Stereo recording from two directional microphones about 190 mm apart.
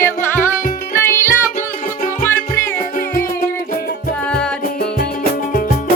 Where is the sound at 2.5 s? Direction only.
45° left (ahead or behind).